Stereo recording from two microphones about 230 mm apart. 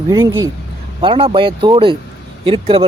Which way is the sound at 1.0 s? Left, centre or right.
Right.